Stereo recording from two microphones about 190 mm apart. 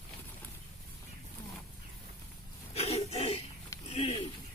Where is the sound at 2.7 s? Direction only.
35° left (ahead or behind).